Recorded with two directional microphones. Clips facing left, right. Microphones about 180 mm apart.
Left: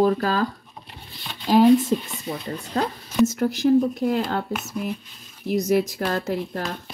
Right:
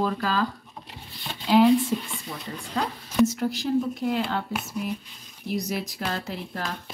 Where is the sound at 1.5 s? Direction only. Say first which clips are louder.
Left 3 dB; 40° left (ahead or behind).